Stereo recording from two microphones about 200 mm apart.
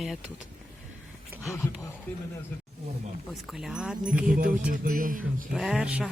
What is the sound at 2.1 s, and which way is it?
Speech, 10° left (ahead or behind).